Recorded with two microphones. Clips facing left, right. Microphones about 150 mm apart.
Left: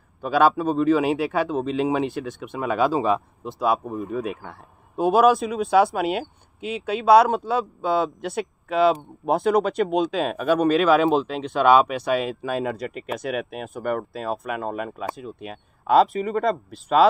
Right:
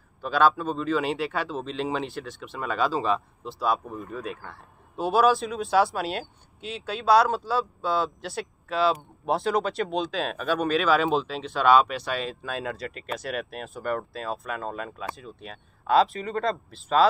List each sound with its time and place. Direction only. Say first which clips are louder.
0.2 s speech: left 3 dB; 5° left (ahead or behind)
2.4 s speech: left 5 dB; 20° left (ahead or behind)
3.8 s speech: left 7 dB; 20° left (ahead or behind)
5.1 s speech: left 3 dB; centre (ahead or behind)